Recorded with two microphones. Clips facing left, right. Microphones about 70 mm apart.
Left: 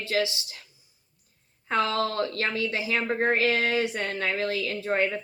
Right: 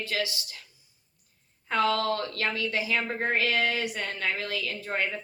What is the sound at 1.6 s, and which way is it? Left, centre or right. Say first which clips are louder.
A woman's voice: even; left.